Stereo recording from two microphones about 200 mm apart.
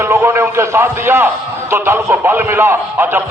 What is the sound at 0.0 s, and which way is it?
A man's voice, 10° right (ahead or behind).